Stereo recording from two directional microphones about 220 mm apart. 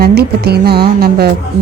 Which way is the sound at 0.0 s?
45° right (ahead or behind).